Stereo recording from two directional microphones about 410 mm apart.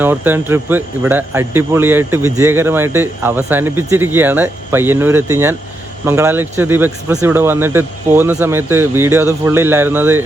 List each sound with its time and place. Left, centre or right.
0.0 s speech: centre